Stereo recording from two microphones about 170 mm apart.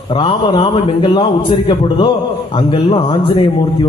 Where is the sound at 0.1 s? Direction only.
30° left (ahead or behind).